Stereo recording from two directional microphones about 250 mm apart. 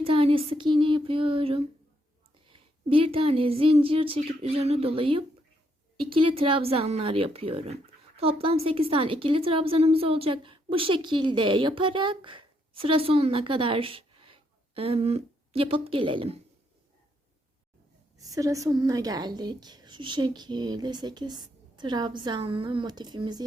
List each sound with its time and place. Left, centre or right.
0.0 s a woman's voice: right
18.2 s speech: centre